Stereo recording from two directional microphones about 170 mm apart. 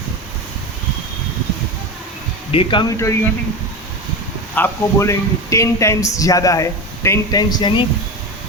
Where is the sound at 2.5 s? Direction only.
30° left (ahead or behind).